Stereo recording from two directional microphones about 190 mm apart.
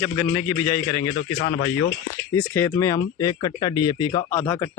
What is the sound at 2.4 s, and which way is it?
Speech, 15° left (ahead or behind).